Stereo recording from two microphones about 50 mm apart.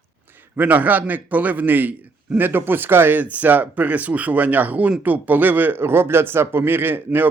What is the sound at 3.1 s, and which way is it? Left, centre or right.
Speech, right.